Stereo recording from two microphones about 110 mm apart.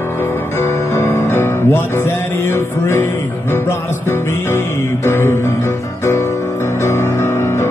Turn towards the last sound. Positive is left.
turn(degrees=25)  # may be behind; listen again after turning